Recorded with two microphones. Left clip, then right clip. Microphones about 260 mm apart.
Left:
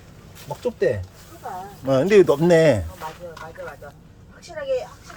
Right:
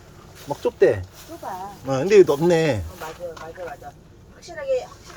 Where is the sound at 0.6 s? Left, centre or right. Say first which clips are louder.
Right 4 dB; centre.